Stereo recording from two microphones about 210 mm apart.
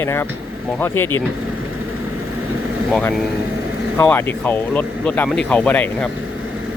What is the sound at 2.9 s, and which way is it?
Speech, centre (ahead or behind).